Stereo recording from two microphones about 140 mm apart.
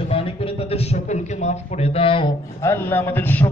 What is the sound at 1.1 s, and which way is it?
Speech, 50° left (ahead or behind).